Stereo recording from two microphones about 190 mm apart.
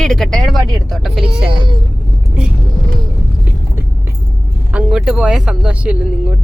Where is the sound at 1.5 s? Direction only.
25° right (ahead or behind).